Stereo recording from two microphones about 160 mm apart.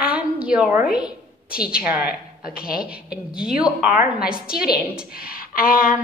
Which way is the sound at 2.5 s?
65° left (ahead or behind).